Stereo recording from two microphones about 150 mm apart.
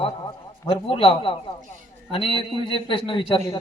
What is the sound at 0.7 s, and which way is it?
A man's voice, 35° left (ahead or behind).